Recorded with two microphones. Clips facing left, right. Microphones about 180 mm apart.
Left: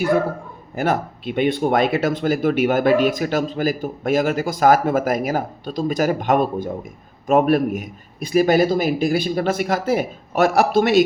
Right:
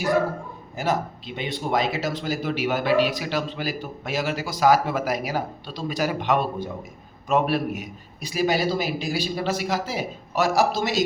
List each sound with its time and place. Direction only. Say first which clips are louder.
0.8 s speech: left 4 dB; 60° left (ahead or behind)